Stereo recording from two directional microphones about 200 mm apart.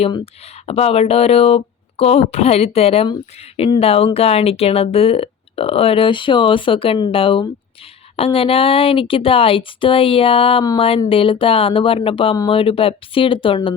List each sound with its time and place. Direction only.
0.7 s speech: 30° left (ahead or behind)